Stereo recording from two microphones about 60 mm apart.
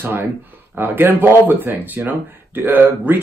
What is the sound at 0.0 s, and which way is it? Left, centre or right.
Speech, right.